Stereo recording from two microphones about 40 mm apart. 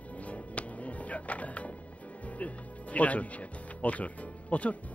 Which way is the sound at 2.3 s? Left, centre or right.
Left.